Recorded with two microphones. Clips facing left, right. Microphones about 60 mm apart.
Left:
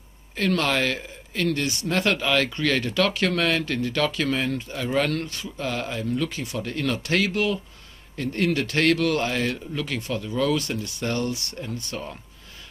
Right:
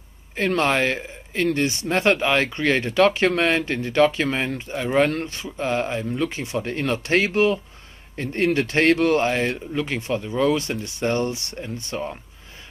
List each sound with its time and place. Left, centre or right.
0.4 s speech: right